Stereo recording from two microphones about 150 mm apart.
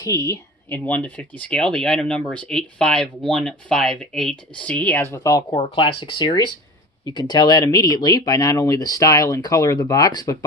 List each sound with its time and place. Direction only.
0.1 s speech: 20° left (ahead or behind)
5.5 s speech: 40° left (ahead or behind)